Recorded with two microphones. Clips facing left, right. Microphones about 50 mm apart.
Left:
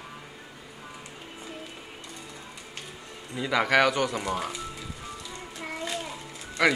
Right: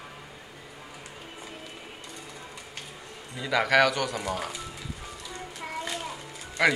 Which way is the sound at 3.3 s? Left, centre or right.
Centre.